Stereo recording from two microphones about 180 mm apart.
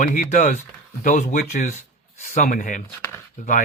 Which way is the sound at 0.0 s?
50° left (ahead or behind).